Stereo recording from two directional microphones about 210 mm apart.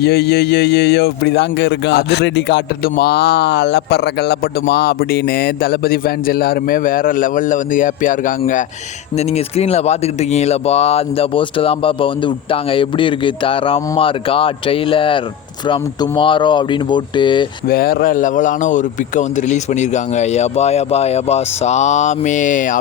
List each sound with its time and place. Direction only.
0.0 s a man's voice: 50° left (ahead or behind); by 17.4 s 20° left (ahead or behind)
17.7 s a man's voice: 45° left (ahead or behind)